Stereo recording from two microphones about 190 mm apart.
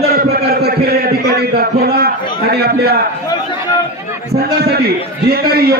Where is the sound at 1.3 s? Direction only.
55° right (ahead or behind).